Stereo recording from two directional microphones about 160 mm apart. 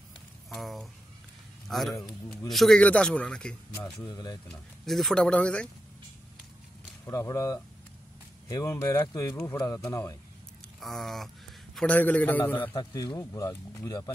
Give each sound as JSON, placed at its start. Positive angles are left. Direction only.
{"t": 0.5, "sound": "a man's voice", "side_deg": 0}
{"t": 3.7, "sound": "speech", "side_deg": 25}
{"t": 4.5, "sound": "a man's voice", "side_deg": 0}
{"t": 7.1, "sound": "speech", "side_deg": 20}
{"t": 10.8, "sound": "a man's voice", "side_deg": 0}
{"t": 12.7, "sound": "speech", "side_deg": 25}